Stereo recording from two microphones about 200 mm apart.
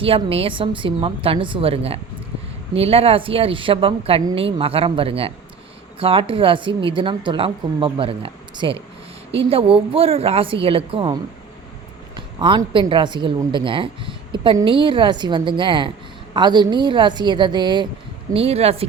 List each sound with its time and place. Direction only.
0.0 s speech: 30° right (ahead or behind)